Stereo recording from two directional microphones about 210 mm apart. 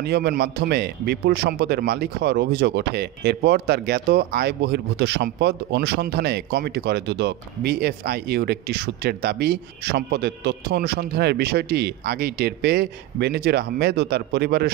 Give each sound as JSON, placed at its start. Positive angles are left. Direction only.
{"t": 0.0, "sound": "a man's voice", "side_deg": -50}